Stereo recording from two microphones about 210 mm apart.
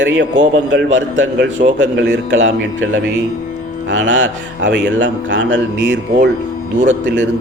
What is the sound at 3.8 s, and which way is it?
Speech, 60° right (ahead or behind).